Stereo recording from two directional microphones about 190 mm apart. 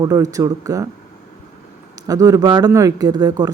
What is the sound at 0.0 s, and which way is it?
Speech, 20° right (ahead or behind).